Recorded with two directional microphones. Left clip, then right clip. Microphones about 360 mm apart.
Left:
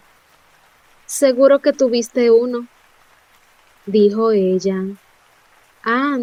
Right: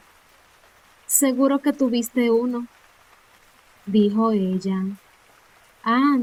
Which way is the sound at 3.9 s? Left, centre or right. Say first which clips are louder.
Left 7 dB; centre.